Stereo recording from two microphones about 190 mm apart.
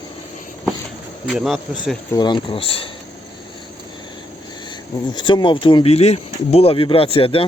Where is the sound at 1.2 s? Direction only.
Centre (ahead or behind).